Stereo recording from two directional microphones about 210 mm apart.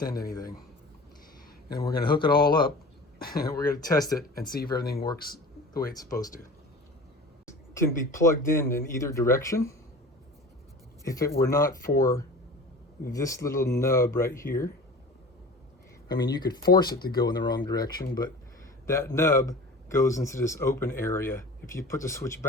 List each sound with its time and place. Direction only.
0.0 s speech: 15° left (ahead or behind)
1.7 s speech: 20° left (ahead or behind)
3.3 s speech: 15° left (ahead or behind)
4.8 s speech: 45° left (ahead or behind)
5.7 s speech: 15° left (ahead or behind)
7.4 s speech: 15° left (ahead or behind)
11.0 s speech: 15° left (ahead or behind)
16.0 s speech: 20° left (ahead or behind)